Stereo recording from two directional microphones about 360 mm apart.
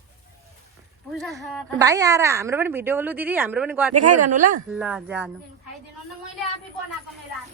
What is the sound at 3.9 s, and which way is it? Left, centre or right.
Speech, right.